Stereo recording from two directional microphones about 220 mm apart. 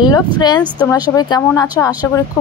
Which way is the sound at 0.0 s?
20° left (ahead or behind).